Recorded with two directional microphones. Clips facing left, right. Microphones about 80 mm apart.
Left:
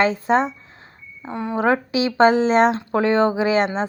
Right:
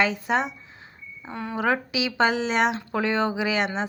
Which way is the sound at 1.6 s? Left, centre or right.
Left.